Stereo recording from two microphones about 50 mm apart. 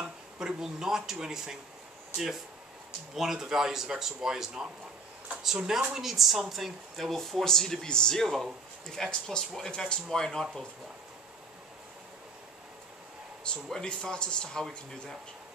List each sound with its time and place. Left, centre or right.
0.4 s speech: centre
3.2 s a woman's voice: centre
13.7 s speech: centre